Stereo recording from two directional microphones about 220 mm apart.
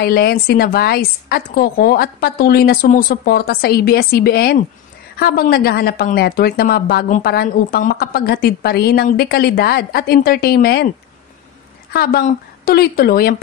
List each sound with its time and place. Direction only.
0.0 s a woman's voice: 45° left (ahead or behind)
11.9 s a woman's voice: 45° left (ahead or behind)